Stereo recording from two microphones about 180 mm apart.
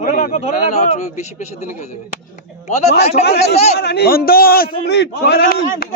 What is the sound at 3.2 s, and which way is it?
A man's voice, 65° left (ahead or behind).